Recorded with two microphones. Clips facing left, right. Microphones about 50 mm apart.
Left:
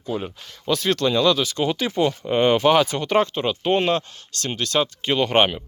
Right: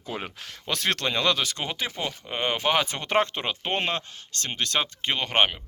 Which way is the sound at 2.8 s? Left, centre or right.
Right.